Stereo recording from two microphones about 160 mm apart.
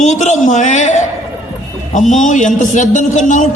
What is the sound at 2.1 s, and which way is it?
A man's voice, 50° left (ahead or behind).